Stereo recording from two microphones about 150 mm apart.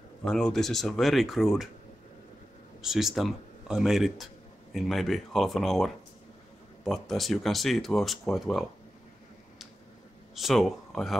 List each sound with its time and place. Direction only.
0.2 s speech: 5° left (ahead or behind)
2.8 s speech: centre (ahead or behind)
10.3 s speech: centre (ahead or behind)